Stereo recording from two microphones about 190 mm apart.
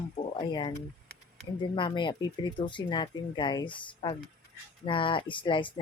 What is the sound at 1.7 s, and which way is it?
Speech, 25° left (ahead or behind).